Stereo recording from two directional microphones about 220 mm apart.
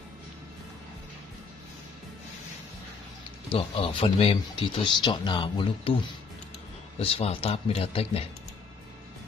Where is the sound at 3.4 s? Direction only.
25° left (ahead or behind).